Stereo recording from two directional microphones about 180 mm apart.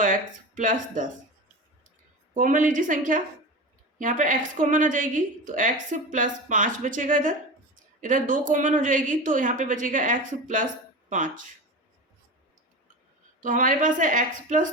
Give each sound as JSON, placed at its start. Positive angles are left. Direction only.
{"t": 0.0, "sound": "speech", "side_deg": -45}
{"t": 2.3, "sound": "a woman's voice", "side_deg": -50}
{"t": 13.4, "sound": "a woman's voice", "side_deg": -45}